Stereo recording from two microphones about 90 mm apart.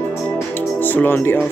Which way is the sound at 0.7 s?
20° left (ahead or behind).